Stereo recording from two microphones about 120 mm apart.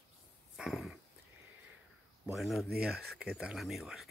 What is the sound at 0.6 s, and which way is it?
Dog, centre (ahead or behind).